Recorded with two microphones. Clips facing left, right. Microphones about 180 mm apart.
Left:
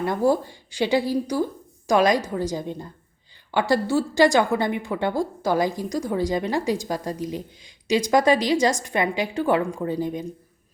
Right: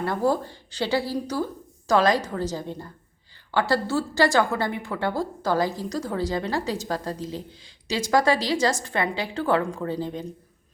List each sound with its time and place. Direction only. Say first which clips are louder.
0.0 s a woman's voice: left 3 dB; 15° left (ahead or behind)